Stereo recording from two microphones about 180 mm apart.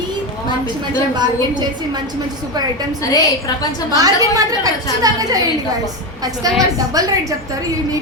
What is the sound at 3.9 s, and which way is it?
A woman's voice, 20° right (ahead or behind).